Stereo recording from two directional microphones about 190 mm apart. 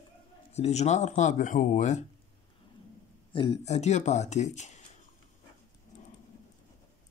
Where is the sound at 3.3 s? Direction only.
30° left (ahead or behind).